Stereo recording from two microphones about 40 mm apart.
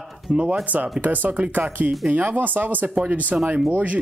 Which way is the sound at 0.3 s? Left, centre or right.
Right.